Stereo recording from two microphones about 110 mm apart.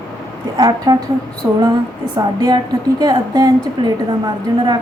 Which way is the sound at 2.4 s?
40° right (ahead or behind).